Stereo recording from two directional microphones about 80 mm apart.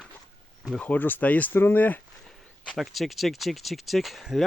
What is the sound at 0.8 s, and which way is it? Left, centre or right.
Speech, centre.